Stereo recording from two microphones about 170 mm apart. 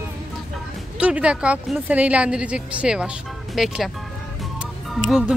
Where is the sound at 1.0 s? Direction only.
5° right (ahead or behind).